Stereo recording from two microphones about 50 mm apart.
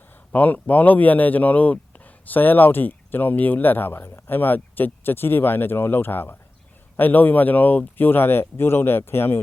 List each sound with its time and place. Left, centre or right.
0.3 s speech: left